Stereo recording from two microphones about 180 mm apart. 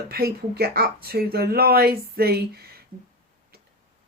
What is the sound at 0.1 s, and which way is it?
Speech, 60° right (ahead or behind).